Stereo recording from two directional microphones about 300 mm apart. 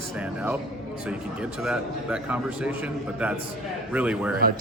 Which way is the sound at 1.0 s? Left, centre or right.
Centre.